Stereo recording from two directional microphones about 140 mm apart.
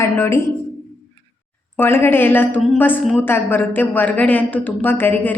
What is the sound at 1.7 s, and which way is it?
A woman's voice, 15° left (ahead or behind).